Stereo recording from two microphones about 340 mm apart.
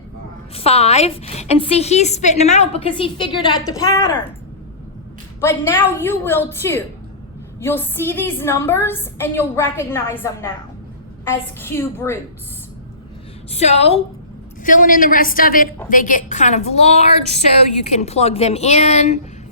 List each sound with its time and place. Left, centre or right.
0.5 s a woman's voice: centre
5.4 s a woman's voice: centre
13.5 s a woman's voice: centre